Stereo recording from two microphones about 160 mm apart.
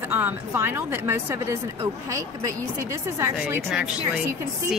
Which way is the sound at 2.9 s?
20° right (ahead or behind).